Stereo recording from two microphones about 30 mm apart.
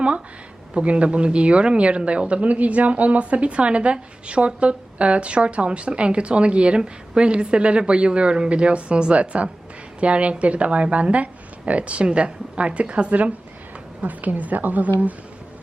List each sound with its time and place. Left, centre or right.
0.8 s a woman's voice: right
11.1 s a woman's voice: right